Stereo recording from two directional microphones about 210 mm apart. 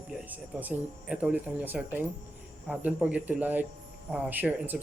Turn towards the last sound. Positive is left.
turn(degrees=-10)  # may be behind; listen again after turning